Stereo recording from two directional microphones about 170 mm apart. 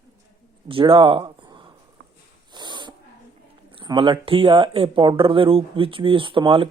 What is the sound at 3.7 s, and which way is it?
Speech, 30° right (ahead or behind).